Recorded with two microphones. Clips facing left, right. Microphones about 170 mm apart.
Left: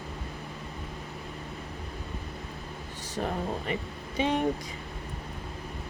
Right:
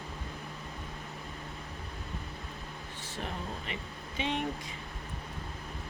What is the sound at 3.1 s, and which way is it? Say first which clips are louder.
Speech: left 8 dB; 45° left (ahead or behind).